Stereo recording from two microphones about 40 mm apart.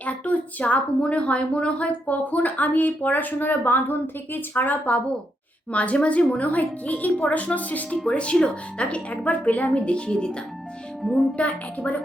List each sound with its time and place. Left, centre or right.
0.0 s a woman's voice: left
8.1 s a woman's voice: left
9.8 s a woman's voice: left
11.0 s speech: centre
11.3 s a woman's voice: left